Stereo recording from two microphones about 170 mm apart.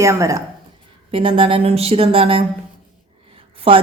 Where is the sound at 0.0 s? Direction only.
15° right (ahead or behind).